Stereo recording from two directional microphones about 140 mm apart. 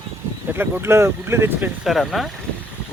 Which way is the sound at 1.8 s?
Centre (ahead or behind).